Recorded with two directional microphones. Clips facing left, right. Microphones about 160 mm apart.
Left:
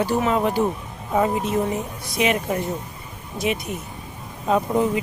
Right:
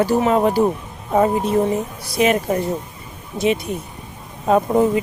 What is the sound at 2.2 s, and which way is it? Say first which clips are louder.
Speech: right 4 dB; 40° right (ahead or behind).